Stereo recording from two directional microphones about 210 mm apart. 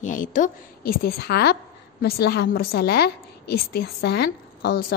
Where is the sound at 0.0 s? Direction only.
40° left (ahead or behind).